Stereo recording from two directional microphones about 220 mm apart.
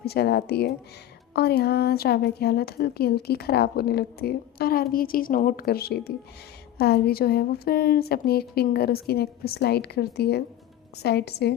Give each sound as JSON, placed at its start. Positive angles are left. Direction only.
{"t": 0.0, "sound": "a woman's voice", "side_deg": 45}